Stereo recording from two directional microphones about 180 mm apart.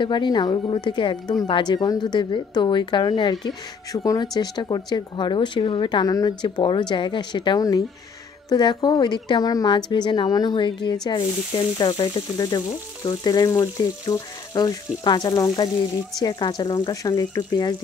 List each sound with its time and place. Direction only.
0.0 s a woman's voice: 25° left (ahead or behind)